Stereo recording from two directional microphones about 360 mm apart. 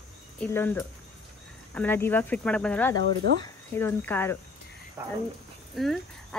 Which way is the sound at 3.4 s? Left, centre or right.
Centre.